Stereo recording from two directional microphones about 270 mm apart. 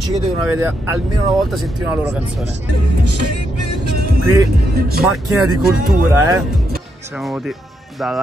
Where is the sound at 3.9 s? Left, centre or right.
Right.